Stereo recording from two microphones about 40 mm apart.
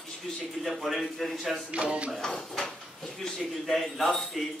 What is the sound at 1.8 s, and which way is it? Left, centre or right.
Speech, right.